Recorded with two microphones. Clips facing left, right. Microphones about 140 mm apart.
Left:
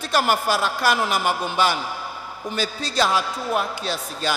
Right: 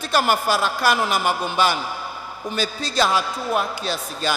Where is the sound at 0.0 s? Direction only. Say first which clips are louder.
Right 1 dB; 20° right (ahead or behind).